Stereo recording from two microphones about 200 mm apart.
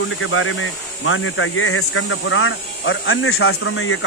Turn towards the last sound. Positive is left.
turn(degrees=90)